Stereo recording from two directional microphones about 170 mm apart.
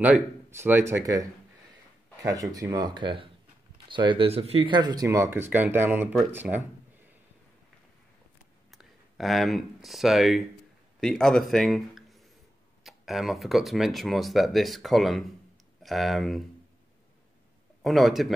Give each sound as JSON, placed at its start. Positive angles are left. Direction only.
{"t": 0.0, "sound": "a man's voice", "side_deg": -10}
{"t": 2.5, "sound": "a man's voice", "side_deg": -20}
{"t": 8.7, "sound": "speech", "side_deg": 0}
{"t": 17.8, "sound": "speech", "side_deg": 0}